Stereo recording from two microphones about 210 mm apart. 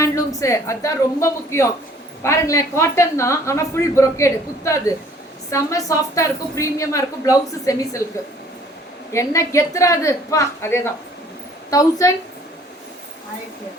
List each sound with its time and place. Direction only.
0.0 s a woman's voice: 15° left (ahead or behind)
9.1 s a woman's voice: 15° left (ahead or behind)